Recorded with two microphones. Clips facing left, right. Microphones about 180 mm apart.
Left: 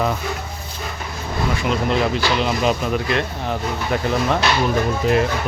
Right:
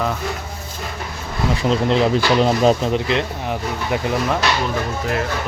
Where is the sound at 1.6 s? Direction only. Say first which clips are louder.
Right 4 dB; 25° right (ahead or behind).